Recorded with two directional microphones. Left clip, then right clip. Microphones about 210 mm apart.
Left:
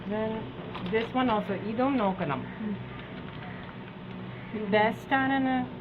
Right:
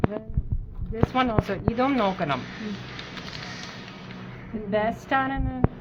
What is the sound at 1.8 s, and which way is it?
Speech, 55° right (ahead or behind).